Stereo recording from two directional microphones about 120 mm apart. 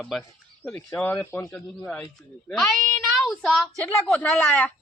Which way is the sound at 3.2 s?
5° left (ahead or behind).